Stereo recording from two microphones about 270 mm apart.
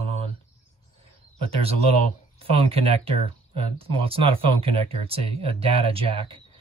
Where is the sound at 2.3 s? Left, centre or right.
Right.